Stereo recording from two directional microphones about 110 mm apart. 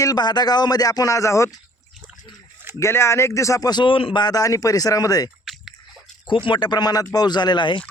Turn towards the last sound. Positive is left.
turn(degrees=45)  # may be behind; listen again after turning